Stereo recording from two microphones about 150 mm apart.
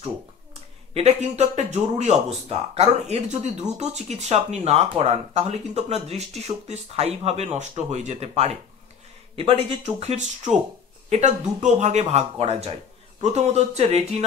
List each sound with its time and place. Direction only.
0.9 s speech: 45° right (ahead or behind)